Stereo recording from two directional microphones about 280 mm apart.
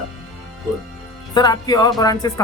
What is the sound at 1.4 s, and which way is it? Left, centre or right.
Speech, centre.